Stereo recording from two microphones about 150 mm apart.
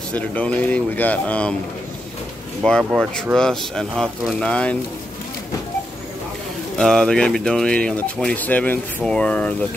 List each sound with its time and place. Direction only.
0.1 s speech: 10° left (ahead or behind)
2.8 s speech: 10° right (ahead or behind)
3.3 s speech: 5° left (ahead or behind)
6.8 s speech: 5° left (ahead or behind)